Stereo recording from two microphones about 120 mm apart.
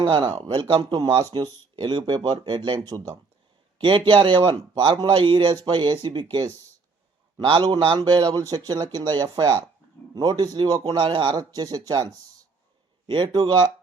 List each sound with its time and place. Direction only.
0.0 s speech: 45° right (ahead or behind)
3.8 s speech: 45° right (ahead or behind)
7.3 s speech: 45° right (ahead or behind)
13.1 s speech: 40° right (ahead or behind)